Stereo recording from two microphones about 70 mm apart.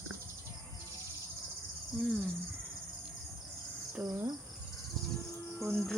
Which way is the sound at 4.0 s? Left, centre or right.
Right.